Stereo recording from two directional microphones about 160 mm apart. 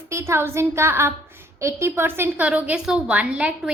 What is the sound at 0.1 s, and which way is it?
A woman's voice, 15° right (ahead or behind).